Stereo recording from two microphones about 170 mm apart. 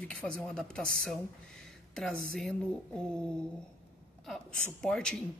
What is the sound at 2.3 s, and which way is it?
A woman's voice, 5° left (ahead or behind).